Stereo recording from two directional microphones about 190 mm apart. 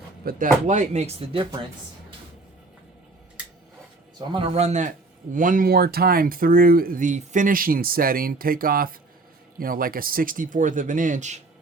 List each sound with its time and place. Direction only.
0.3 s speech: 45° right (ahead or behind); by 1.5 s 25° right (ahead or behind)
4.2 s speech: 25° right (ahead or behind); by 11.3 s 40° right (ahead or behind)